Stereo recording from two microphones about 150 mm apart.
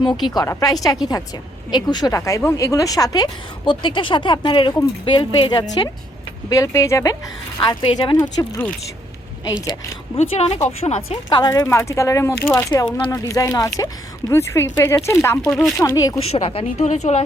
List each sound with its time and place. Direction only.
0.0 s speech: 30° left (ahead or behind)
6.5 s speech: 20° left (ahead or behind)
7.6 s speech: 35° left (ahead or behind)
10.2 s speech: 45° left (ahead or behind)
11.3 s speech: 30° left (ahead or behind)
15.4 s speech: centre (ahead or behind)
15.8 s speech: 25° left (ahead or behind)
16.2 s speech: 40° left (ahead or behind)
16.7 s speech: 50° left (ahead or behind)